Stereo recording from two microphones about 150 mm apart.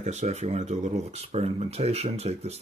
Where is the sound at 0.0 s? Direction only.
50° right (ahead or behind).